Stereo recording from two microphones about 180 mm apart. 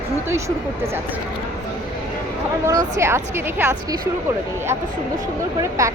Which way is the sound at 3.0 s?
15° right (ahead or behind).